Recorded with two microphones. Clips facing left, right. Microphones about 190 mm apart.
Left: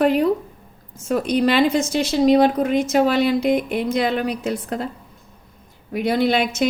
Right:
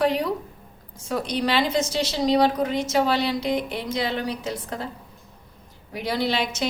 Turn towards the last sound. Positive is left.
turn(degrees=55)  # may be behind; listen again after turning